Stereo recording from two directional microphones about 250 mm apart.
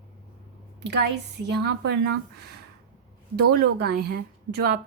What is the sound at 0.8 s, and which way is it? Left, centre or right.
A woman's voice, right.